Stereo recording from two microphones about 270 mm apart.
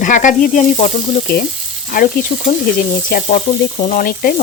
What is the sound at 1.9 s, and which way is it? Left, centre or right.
Sizzle, left.